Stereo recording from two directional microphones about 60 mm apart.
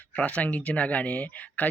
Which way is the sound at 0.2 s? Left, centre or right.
Left.